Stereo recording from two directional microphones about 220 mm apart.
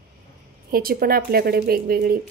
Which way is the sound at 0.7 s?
40° right (ahead or behind).